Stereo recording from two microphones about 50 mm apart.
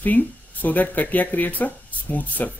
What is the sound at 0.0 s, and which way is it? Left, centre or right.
Speech, left.